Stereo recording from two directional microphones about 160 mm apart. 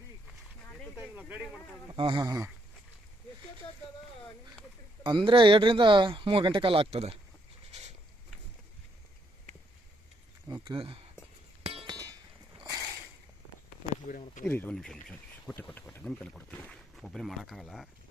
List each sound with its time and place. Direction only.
1.9 s speech: 30° right (ahead or behind)
5.0 s speech: 30° right (ahead or behind)
7.7 s a sound: 45° right (ahead or behind)
10.5 s speech: 30° right (ahead or behind)
11.9 s a sound: 25° right (ahead or behind)
14.1 s speech: 50° left (ahead or behind)
14.4 s speech: 10° left (ahead or behind)